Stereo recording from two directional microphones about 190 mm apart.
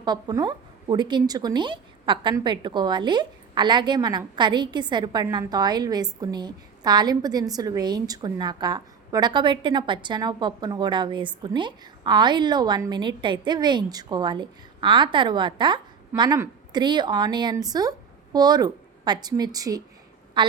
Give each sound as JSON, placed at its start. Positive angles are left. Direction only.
{"t": 0.0, "sound": "a woman's voice", "side_deg": -20}